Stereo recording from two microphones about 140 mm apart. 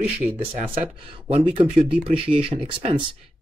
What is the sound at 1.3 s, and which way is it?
Speech, 45° right (ahead or behind).